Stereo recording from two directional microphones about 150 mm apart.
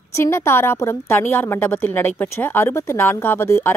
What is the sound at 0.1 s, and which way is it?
A woman's voice, 20° left (ahead or behind).